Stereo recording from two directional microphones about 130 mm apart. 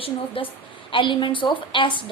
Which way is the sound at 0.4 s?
45° left (ahead or behind).